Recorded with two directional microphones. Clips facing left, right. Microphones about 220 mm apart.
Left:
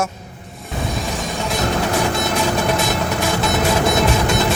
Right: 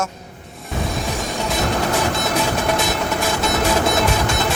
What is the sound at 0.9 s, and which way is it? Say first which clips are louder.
Music: left 1 dB; centre (ahead or behind).